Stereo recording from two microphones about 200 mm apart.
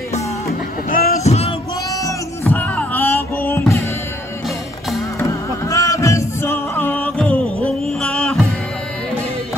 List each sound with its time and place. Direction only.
0.5 s a sound: 45° left (ahead or behind)
1.9 s music: 15° left (ahead or behind)
5.2 s music: 15° left (ahead or behind)